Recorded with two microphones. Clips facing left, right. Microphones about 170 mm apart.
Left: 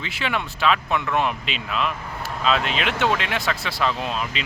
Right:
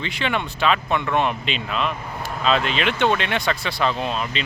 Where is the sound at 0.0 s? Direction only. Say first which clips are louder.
Right 2 dB; 5° left (ahead or behind).